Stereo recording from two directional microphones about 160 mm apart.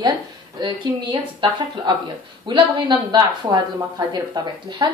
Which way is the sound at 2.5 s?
30° right (ahead or behind).